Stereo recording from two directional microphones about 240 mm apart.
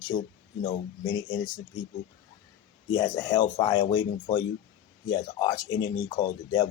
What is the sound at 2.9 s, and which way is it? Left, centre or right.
Speech, centre.